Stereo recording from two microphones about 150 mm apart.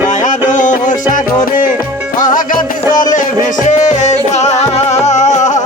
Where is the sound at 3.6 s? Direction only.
50° left (ahead or behind).